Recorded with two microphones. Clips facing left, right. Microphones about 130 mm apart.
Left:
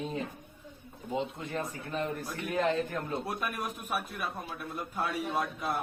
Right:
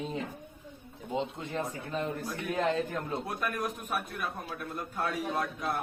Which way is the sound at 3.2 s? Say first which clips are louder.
Right 1 dB; 5° left (ahead or behind).